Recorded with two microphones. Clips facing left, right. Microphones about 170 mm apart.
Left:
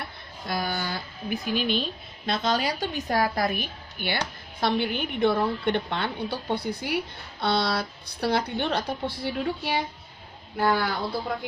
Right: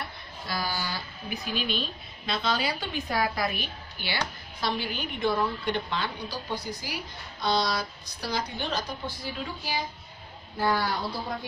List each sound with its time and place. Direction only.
0.4 s a woman's voice: 50° left (ahead or behind)